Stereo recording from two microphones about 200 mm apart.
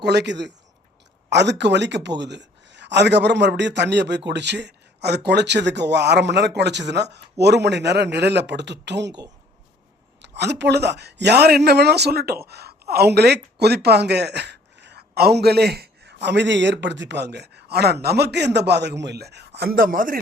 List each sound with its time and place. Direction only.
0.0 s speech: 55° right (ahead or behind)
10.2 s speech: 60° right (ahead or behind)